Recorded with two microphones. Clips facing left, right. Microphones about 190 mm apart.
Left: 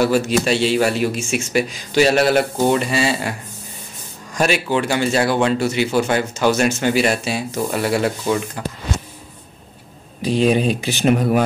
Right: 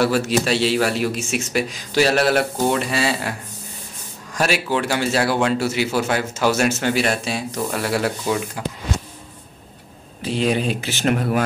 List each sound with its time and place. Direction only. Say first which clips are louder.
0.0 s speech: left 2 dB; centre (ahead or behind)
10.2 s speech: left 4 dB; 15° left (ahead or behind)